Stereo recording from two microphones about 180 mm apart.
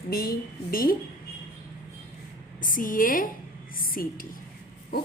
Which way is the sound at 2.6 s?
45° left (ahead or behind).